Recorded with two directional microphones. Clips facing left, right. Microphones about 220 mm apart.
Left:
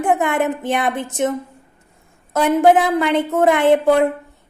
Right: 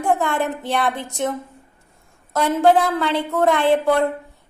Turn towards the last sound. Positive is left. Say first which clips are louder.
# left 4 dB
turn(degrees=20)  # may be behind; listen again after turning